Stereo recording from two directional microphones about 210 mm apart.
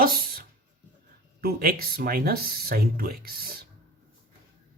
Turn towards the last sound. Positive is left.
turn(degrees=-45)  # may be behind; listen again after turning